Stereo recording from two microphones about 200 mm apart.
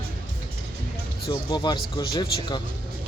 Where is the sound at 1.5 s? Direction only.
20° left (ahead or behind).